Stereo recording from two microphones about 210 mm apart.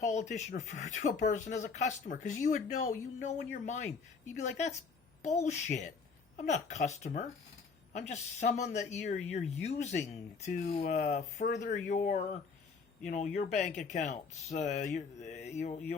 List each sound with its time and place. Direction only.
0.0 s speech: 35° left (ahead or behind)
4.4 s speech: 35° left (ahead or behind)